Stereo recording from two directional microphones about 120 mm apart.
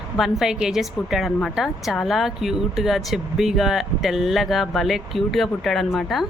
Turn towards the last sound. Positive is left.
turn(degrees=0)  # may be behind; listen again after turning